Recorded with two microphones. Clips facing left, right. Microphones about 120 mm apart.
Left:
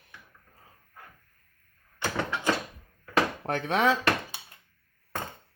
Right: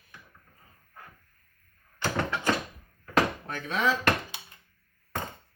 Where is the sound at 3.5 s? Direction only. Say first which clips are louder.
Left 4 dB; 65° left (ahead or behind).